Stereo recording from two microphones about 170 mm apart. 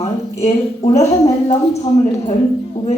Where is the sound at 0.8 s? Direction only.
40° left (ahead or behind).